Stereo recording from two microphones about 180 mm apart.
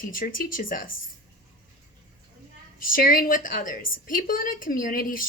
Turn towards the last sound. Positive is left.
turn(degrees=50)  # may be behind; listen again after turning